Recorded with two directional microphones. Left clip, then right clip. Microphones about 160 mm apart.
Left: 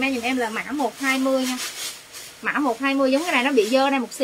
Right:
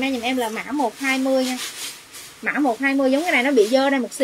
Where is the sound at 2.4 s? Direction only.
5° left (ahead or behind).